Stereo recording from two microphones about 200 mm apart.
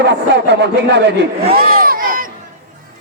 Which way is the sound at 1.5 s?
50° right (ahead or behind).